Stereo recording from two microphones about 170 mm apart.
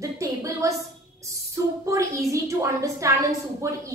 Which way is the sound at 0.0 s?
20° right (ahead or behind).